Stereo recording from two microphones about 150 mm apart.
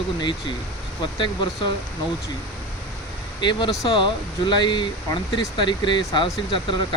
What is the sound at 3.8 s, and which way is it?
Speech, 30° left (ahead or behind).